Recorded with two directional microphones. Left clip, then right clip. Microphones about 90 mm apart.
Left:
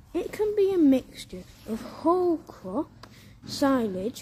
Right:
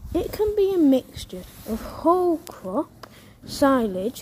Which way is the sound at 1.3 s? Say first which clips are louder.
Right 4 dB; 30° right (ahead or behind).